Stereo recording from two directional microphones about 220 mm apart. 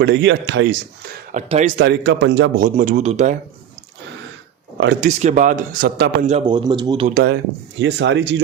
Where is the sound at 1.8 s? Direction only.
50° right (ahead or behind).